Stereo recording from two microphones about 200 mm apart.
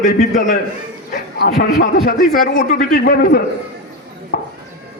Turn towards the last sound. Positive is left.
turn(degrees=45)  # may be behind; listen again after turning